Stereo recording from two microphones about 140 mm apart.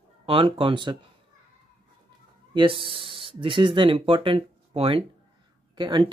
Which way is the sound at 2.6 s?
40° right (ahead or behind).